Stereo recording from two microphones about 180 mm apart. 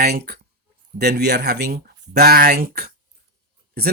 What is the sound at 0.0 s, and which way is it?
Speech, 65° right (ahead or behind).